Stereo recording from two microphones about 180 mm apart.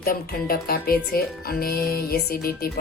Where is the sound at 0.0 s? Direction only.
55° left (ahead or behind).